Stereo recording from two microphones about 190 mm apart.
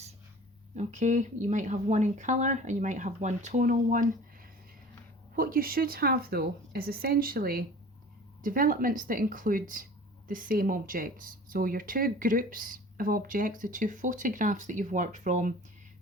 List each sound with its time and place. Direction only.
0.8 s speech: 40° right (ahead or behind)
5.4 s speech: 50° right (ahead or behind)